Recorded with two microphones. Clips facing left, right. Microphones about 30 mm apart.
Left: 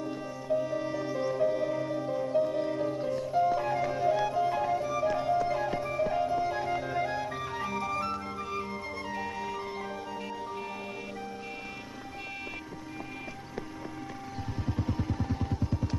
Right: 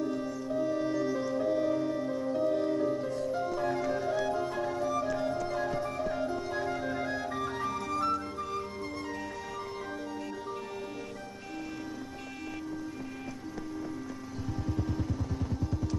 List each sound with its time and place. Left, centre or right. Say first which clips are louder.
0.0 s music: right 3 dB; centre
0.9 s music: even; centre
14.7 s music: left 2 dB; left